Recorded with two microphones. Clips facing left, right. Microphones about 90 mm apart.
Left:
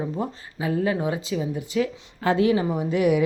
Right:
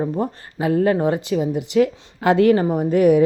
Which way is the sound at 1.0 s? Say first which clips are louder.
Right 6 dB; 60° right (ahead or behind).